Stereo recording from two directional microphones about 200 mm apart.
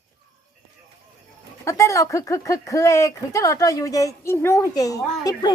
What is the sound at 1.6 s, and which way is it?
Speech, 15° left (ahead or behind).